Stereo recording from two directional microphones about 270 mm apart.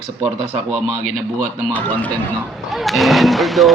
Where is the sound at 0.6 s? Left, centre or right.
Centre.